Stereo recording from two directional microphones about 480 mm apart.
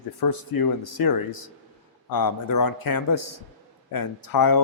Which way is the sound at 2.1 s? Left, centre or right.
Left.